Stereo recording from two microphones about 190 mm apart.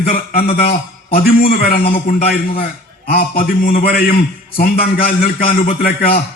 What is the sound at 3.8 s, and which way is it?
A man's voice, 50° left (ahead or behind).